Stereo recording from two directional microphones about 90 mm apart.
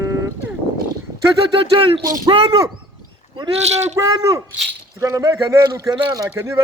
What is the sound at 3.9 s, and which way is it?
Speech, 35° right (ahead or behind).